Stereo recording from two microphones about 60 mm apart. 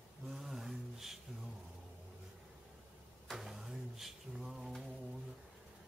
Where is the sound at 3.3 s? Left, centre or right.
Centre.